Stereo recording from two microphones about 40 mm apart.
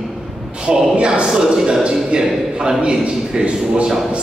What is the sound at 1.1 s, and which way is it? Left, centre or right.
A man's voice, centre.